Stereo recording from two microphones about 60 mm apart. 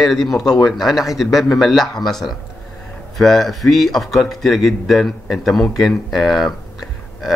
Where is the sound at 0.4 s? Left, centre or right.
Left.